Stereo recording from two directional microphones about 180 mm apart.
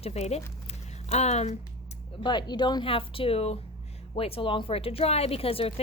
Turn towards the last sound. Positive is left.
turn(degrees=30)  # may be behind; listen again after turning